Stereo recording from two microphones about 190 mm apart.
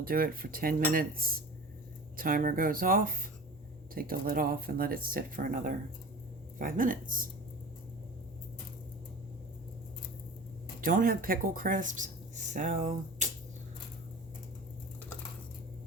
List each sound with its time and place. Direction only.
0.0 s speech: 50° right (ahead or behind)
10.8 s speech: 45° right (ahead or behind)